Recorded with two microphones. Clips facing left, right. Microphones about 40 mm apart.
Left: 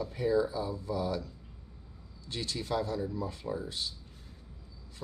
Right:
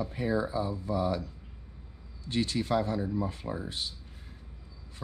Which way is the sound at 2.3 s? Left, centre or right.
Right.